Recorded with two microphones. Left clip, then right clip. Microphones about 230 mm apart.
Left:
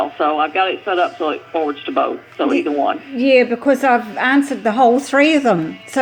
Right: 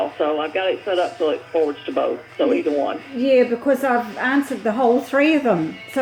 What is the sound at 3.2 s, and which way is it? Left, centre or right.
A woman's voice, left.